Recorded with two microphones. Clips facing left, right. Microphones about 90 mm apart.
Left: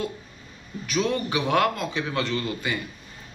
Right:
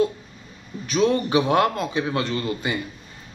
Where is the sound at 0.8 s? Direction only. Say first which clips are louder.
Right 5 dB; 25° right (ahead or behind).